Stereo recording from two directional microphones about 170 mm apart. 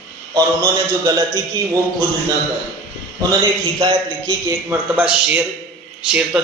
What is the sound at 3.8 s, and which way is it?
Speech, 25° right (ahead or behind).